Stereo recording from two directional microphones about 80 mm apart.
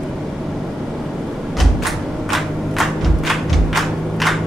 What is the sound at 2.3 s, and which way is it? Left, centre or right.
Thump, centre.